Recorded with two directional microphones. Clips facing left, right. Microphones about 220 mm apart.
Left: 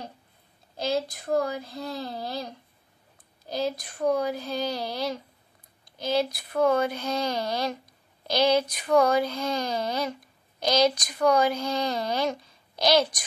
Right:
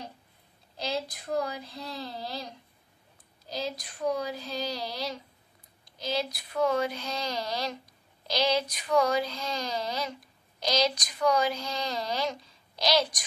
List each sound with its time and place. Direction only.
0.7 s speech: 50° left (ahead or behind)
3.4 s speech: 55° left (ahead or behind)